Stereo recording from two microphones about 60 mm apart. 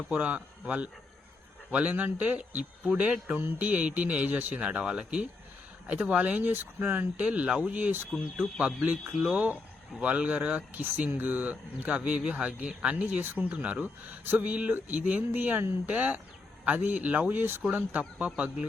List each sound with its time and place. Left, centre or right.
0.2 s speech: right
7.3 s speech: centre